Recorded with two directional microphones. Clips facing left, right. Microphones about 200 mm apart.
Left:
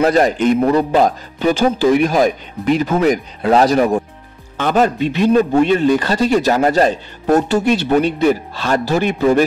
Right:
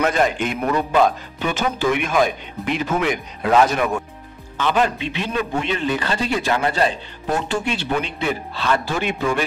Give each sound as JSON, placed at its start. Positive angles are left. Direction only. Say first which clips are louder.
{"t": 0.0, "sound": "a man's voice", "louder": "left 6 dB", "side_deg": 40}